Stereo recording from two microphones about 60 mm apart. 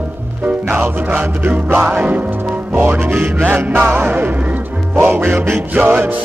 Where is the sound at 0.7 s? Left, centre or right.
Right.